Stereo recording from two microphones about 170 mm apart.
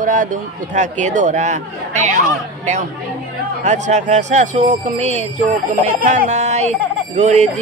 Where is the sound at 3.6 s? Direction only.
45° right (ahead or behind).